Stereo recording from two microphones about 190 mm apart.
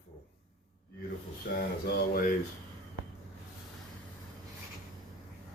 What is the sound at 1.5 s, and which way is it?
Mantra, 50° left (ahead or behind).